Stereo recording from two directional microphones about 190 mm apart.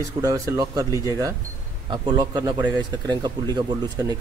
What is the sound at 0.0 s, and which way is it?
Speech, 15° right (ahead or behind).